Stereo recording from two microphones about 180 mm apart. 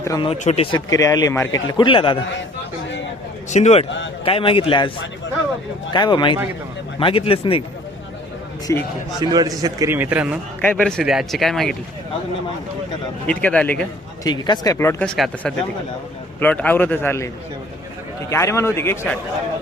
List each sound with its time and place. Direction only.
0.3 s speech: 35° left (ahead or behind)
0.9 s speech: 20° left (ahead or behind)
3.5 s speech: 40° left (ahead or behind)
3.8 s a man's voice: 90° left
4.3 s speech: 30° left (ahead or behind)
5.9 s speech: 25° left (ahead or behind)
8.7 s speech: 15° left (ahead or behind)
9.2 s a man's voice: 20° right (ahead or behind)
10.6 s speech: 5° left (ahead or behind)
13.2 s speech: 5° left (ahead or behind)
14.3 s speech: 25° left (ahead or behind)
18.3 s speech: 15° left (ahead or behind)